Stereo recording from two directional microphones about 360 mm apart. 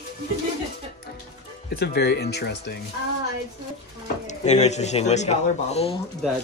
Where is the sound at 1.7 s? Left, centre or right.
Left.